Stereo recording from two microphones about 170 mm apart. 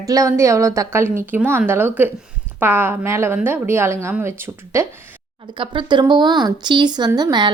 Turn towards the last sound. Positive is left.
turn(degrees=-25)  # may be behind; listen again after turning